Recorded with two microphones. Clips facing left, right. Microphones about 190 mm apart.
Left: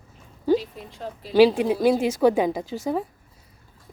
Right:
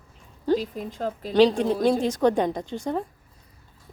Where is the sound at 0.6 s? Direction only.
45° right (ahead or behind).